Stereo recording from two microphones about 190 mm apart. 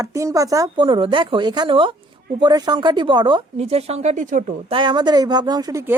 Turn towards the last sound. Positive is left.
turn(degrees=-15)  # may be behind; listen again after turning